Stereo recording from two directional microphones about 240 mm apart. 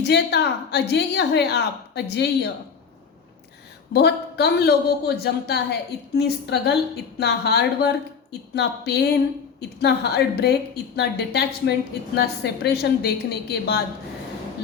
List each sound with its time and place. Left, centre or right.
0.0 s a woman's voice: left
3.9 s a woman's voice: left